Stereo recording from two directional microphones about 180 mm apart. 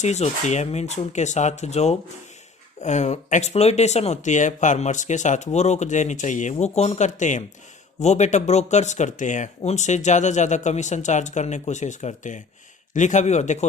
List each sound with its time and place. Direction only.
0.0 s speech: 40° left (ahead or behind)